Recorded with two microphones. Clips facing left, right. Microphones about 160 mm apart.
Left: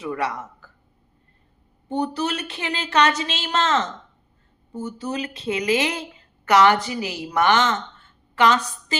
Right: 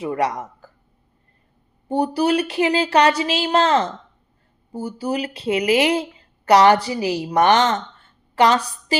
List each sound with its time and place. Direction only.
0.0 s speech: 35° right (ahead or behind)
1.9 s a woman's voice: 35° right (ahead or behind)